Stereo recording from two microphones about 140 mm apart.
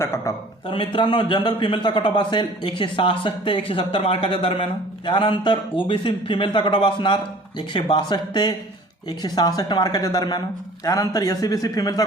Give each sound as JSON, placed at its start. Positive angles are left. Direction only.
{"t": 0.7, "sound": "a man's voice", "side_deg": 40}